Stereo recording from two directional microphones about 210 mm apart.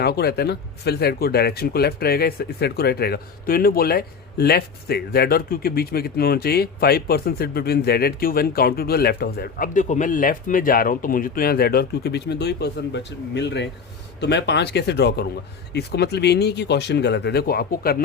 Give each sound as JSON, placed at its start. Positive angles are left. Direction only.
{"t": 0.0, "sound": "speech", "side_deg": 50}